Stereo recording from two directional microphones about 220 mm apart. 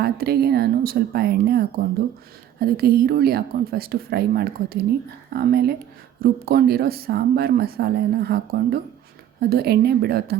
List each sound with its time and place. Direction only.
0.0 s speech: 45° right (ahead or behind)